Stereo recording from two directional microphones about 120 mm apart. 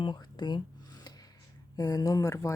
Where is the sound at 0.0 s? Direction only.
40° left (ahead or behind).